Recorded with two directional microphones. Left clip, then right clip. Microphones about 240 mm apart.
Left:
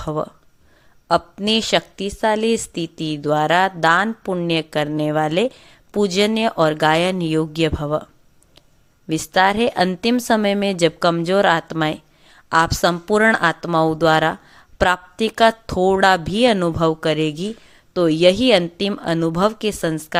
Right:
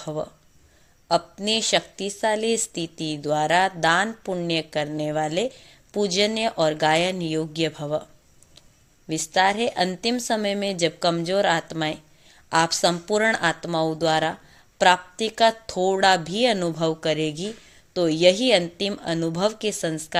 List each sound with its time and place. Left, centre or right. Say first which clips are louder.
0.0 s a woman's voice: left 6 dB; left
9.0 s a woman's voice: left 4 dB; centre